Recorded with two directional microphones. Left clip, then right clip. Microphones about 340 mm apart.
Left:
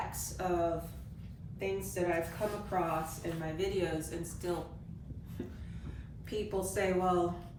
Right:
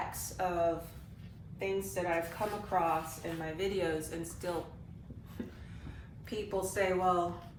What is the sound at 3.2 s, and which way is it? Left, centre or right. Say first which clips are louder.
A woman's voice: even; centre.